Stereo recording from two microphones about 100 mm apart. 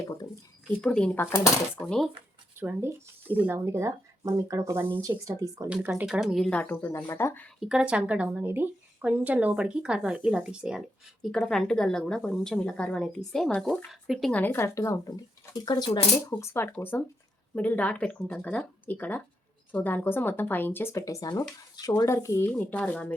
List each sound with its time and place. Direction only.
0.8 s a woman's voice: 10° left (ahead or behind)
1.1 s speech: 20° left (ahead or behind)
2.6 s speech: 20° right (ahead or behind)
3.7 s speech: 25° right (ahead or behind)
5.6 s speech: 15° right (ahead or behind)
6.1 s speech: centre (ahead or behind)
6.5 s a woman's voice: 15° left (ahead or behind)
6.8 s speech: 25° left (ahead or behind)
7.6 s speech: 5° right (ahead or behind)
11.2 s a woman's voice: 5° left (ahead or behind)
14.3 s speech: 15° left (ahead or behind)
14.8 s speech: 35° left (ahead or behind)
16.4 s a woman's voice: 25° left (ahead or behind)
22.4 s a woman's voice: 15° left (ahead or behind)